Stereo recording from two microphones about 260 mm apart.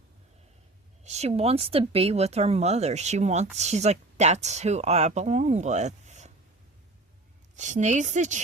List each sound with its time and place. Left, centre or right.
1.0 s speech: right
7.5 s speech: right